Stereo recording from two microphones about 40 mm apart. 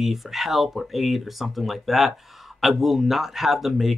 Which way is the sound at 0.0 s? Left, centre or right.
Centre.